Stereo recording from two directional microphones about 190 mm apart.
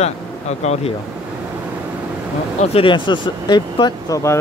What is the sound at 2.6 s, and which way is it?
Speech, 30° left (ahead or behind).